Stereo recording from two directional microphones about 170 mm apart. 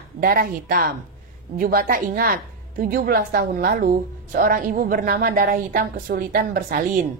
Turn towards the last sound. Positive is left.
turn(degrees=-55)  # may be behind; listen again after turning